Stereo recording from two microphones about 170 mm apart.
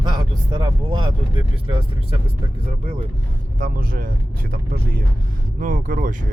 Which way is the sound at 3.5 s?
55° right (ahead or behind).